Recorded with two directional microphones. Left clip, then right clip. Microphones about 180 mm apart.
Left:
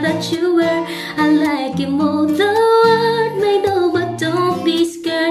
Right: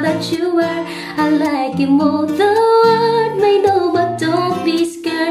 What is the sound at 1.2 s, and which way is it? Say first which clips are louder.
Music: even; 20° left (ahead or behind).